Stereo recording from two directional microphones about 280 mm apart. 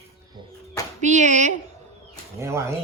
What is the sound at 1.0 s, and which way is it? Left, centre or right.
Speech, right.